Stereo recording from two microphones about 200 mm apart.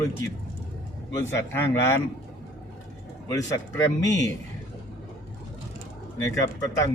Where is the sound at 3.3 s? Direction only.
15° left (ahead or behind).